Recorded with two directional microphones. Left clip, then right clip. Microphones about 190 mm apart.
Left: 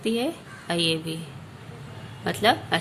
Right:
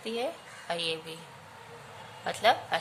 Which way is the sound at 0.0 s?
10° left (ahead or behind).